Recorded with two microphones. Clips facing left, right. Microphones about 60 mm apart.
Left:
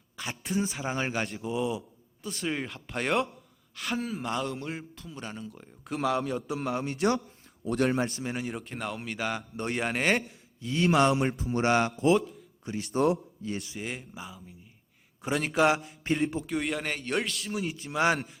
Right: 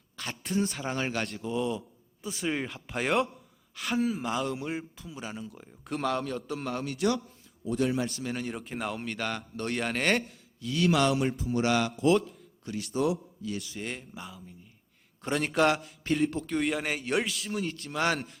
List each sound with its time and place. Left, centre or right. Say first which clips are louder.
0.2 s a man's voice: right 1 dB; centre
2.2 s a man's voice: right 1 dB; centre
7.0 s a man's voice: left 1 dB; left
7.6 s speech: left 2 dB; left
8.1 s mantra: even; left
8.4 s a man's voice: even; centre
10.6 s mantra: left 2 dB; left
11.3 s a man's voice: left 2 dB; left
12.0 s a man's voice: right 1 dB; centre
12.9 s a man's voice: left 3 dB; left
13.7 s a man's voice: left 1 dB; centre
16.6 s a man's voice: right 3 dB; centre